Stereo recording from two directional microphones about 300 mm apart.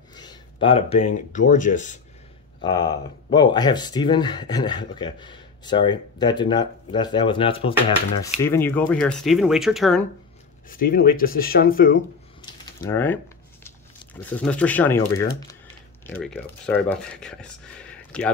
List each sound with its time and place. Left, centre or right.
0.1 s speech: centre
2.6 s speech: centre
10.7 s speech: left
12.4 s typing: centre
14.2 s speech: centre
16.1 s speech: centre